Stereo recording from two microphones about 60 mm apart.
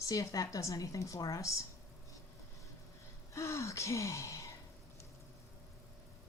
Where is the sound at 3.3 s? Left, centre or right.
Left.